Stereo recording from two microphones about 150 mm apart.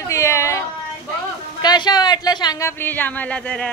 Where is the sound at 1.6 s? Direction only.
30° left (ahead or behind).